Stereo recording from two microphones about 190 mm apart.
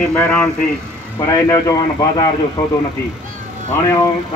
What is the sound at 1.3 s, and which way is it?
Speech, 15° left (ahead or behind).